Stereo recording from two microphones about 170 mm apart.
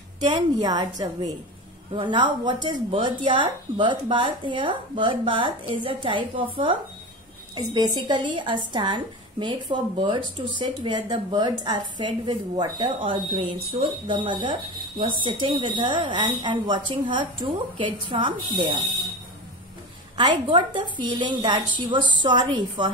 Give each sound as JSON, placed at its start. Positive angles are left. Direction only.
{"t": 0.2, "sound": "speech", "side_deg": -25}
{"t": 7.5, "sound": "speech", "side_deg": -25}
{"t": 20.2, "sound": "speech", "side_deg": -30}